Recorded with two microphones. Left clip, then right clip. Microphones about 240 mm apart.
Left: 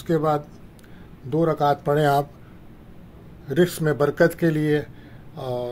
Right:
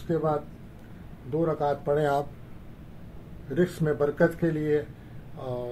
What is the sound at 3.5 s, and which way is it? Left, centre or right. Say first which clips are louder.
Speech: left 5 dB; left.